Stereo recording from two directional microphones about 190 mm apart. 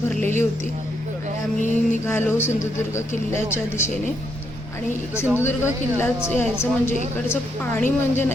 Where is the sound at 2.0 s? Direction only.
10° left (ahead or behind).